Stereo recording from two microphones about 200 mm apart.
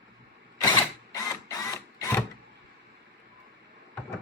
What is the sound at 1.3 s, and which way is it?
Printer, 15° left (ahead or behind).